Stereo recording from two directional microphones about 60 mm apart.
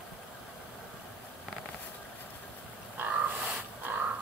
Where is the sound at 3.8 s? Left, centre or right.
Right.